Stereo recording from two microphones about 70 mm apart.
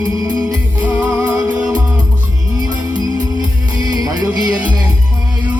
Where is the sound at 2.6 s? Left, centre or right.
Right.